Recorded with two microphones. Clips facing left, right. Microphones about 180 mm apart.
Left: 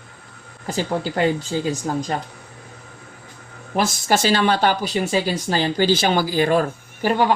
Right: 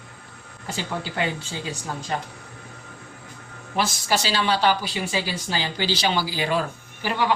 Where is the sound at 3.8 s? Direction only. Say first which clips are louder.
Left 5 dB; 45° left (ahead or behind).